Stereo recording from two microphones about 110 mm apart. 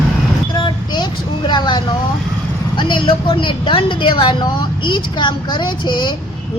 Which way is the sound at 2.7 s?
45° left (ahead or behind).